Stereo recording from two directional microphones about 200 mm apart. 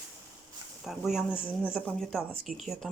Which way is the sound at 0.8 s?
Centre (ahead or behind).